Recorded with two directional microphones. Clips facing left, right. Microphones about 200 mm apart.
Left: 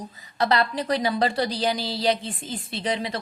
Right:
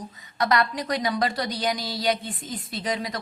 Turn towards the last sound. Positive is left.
turn(degrees=30)  # may be behind; listen again after turning